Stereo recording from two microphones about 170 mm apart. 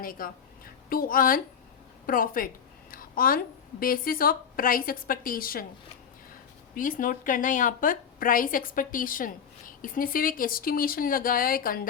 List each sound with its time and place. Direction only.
0.0 s a woman's voice: 55° left (ahead or behind)
6.7 s a woman's voice: 50° left (ahead or behind)